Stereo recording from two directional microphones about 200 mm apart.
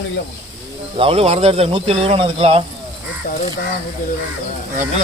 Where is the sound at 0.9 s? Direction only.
30° right (ahead or behind).